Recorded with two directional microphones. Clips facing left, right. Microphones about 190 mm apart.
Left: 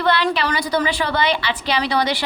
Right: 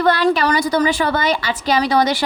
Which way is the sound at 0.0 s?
45° right (ahead or behind).